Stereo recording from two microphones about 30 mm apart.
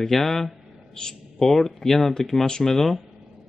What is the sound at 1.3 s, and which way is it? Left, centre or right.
Speech, centre.